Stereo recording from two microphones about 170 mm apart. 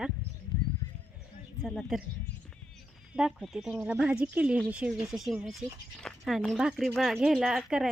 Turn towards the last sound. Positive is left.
turn(degrees=0)  # may be behind; listen again after turning